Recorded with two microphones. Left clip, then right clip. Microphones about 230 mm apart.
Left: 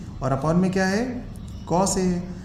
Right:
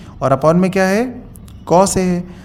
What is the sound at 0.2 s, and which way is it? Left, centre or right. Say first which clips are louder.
A man's voice: right 11 dB; right.